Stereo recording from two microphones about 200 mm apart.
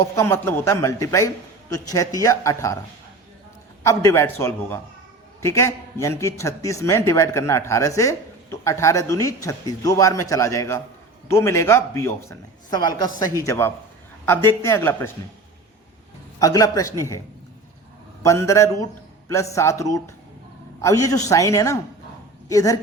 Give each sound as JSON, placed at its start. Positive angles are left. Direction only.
{"t": 0.2, "sound": "a man's voice", "side_deg": 10}
{"t": 3.8, "sound": "a man's voice", "side_deg": 15}
{"t": 16.4, "sound": "a man's voice", "side_deg": 20}
{"t": 18.2, "sound": "a man's voice", "side_deg": 15}